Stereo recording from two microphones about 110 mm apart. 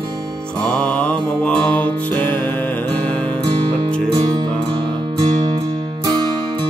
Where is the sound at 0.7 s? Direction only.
10° left (ahead or behind).